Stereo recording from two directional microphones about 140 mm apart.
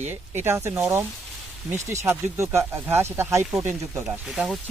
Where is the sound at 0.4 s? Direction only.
20° right (ahead or behind).